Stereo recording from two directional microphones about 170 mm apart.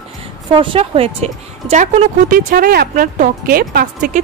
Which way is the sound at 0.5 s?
30° right (ahead or behind).